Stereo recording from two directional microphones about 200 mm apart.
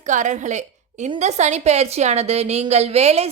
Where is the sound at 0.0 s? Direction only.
35° right (ahead or behind).